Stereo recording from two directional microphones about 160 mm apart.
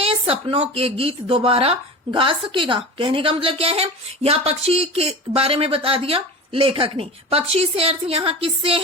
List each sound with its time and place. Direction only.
0.0 s a woman's voice: 35° right (ahead or behind)